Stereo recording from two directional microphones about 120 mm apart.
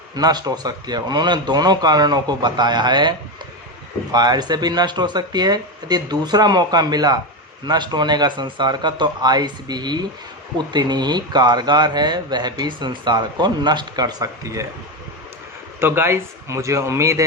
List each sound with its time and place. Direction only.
0.2 s speech: 35° right (ahead or behind)
15.8 s a man's voice: 20° right (ahead or behind)